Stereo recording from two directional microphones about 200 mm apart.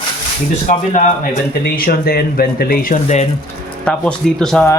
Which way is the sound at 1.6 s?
50° left (ahead or behind).